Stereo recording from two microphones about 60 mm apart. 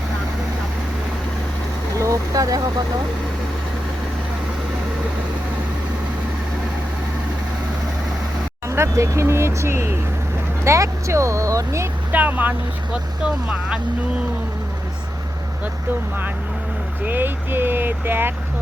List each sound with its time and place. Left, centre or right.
2.0 s vehicle: right
8.6 s speech: right
12.1 s speech: right
12.9 s speech: centre
17.1 s speech: right